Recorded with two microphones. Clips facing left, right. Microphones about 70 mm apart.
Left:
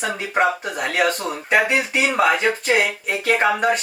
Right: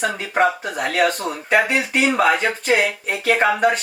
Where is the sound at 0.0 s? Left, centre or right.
Centre.